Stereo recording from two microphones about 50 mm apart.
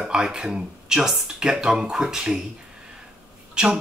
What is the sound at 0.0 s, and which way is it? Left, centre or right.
Speech, centre.